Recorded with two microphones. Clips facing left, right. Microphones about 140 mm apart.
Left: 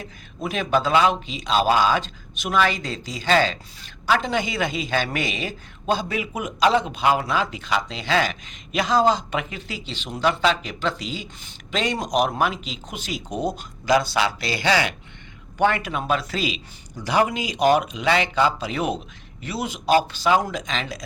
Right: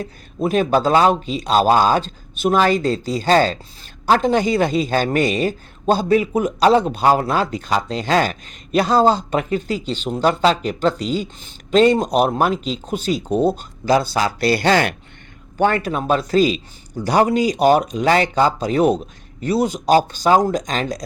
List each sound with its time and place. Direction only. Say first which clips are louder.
0.0 s speech: right 8 dB; 40° right (ahead or behind)